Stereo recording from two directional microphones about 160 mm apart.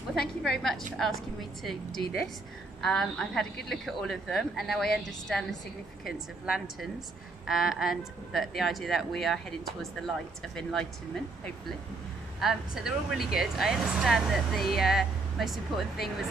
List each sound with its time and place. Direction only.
0.1 s speech: centre (ahead or behind)
2.8 s speech: 5° left (ahead or behind)
12.4 s speech: 5° right (ahead or behind)